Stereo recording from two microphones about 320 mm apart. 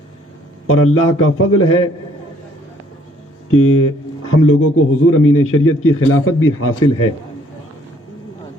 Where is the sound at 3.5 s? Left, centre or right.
Left.